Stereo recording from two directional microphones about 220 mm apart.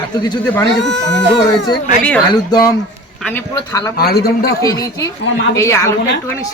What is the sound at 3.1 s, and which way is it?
Speech, 5° left (ahead or behind).